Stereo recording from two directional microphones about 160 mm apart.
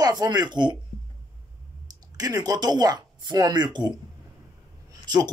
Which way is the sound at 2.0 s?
25° right (ahead or behind).